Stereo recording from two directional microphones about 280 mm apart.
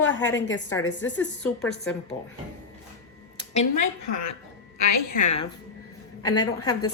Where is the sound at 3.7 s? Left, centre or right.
Left.